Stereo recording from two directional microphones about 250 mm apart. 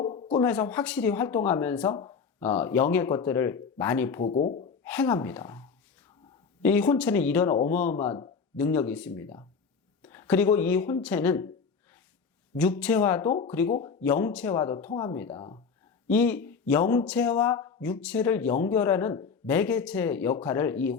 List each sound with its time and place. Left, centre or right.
0.0 s a sound: left
0.3 s speech: centre
4.3 s speech: left
4.8 s speech: centre
12.5 s speech: centre
15.4 s speech: centre
16.0 s speech: centre